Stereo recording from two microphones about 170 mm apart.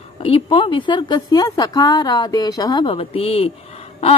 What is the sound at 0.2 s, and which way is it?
Speech, 35° left (ahead or behind).